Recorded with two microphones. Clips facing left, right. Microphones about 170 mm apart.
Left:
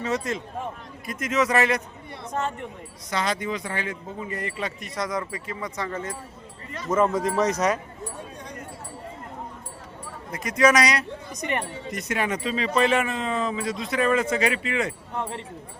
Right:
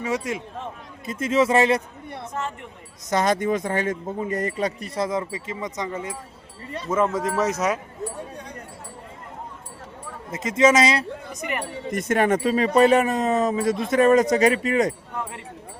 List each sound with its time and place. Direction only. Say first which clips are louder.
0.0 s a man's voice: right 1 dB; 10° right (ahead or behind)
1.0 s speech: right 4 dB; 30° right (ahead or behind)
2.3 s speech: left 4 dB; 40° left (ahead or behind)
3.1 s speech: right 6 dB; 45° right (ahead or behind); by 6.1 s 10° right (ahead or behind)
6.9 s speech: even; centre (ahead or behind)
10.3 s speech: right 2 dB; 25° right (ahead or behind)
11.3 s speech: left 1 dB; 35° left (ahead or behind)
11.9 s speech: right 8 dB; 50° right (ahead or behind)